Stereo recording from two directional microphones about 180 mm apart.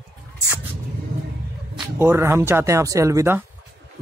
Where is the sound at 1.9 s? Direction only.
15° right (ahead or behind).